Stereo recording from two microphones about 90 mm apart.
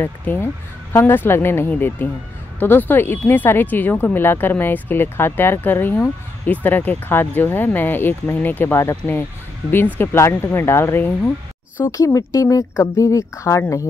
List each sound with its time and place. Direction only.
0.0 s speech: 25° left (ahead or behind)
11.8 s speech: 35° left (ahead or behind)